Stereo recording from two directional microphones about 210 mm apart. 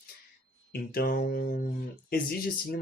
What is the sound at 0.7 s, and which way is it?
Mantra, 45° left (ahead or behind).